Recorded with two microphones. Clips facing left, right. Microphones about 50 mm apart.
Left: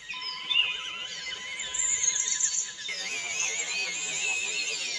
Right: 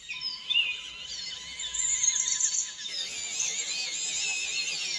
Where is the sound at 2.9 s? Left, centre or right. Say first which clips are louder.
Left 8 dB; left; by 4.9 s centre.